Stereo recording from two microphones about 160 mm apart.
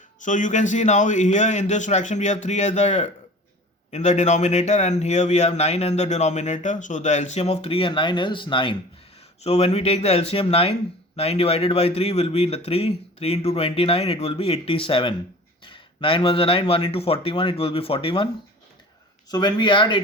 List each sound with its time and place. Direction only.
0.2 s speech: 50° left (ahead or behind); by 8.7 s 30° left (ahead or behind)
9.4 s speech: 40° left (ahead or behind)
19.3 s speech: 25° left (ahead or behind)